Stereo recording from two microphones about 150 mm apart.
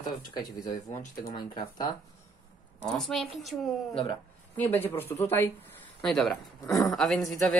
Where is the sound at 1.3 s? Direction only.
30° left (ahead or behind).